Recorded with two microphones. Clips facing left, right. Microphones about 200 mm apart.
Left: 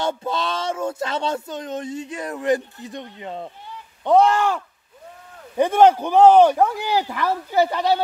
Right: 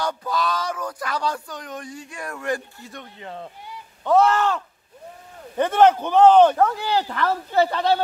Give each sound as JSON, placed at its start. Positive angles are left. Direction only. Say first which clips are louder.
{"t": 0.0, "sound": "speech", "louder": "left 1 dB", "side_deg": 25}